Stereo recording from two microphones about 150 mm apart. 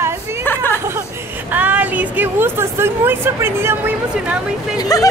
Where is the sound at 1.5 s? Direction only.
10° right (ahead or behind).